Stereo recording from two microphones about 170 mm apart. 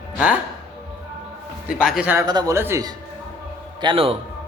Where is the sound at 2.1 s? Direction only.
20° right (ahead or behind).